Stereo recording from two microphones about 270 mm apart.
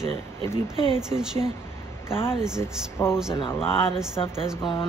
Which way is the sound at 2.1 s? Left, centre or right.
Centre.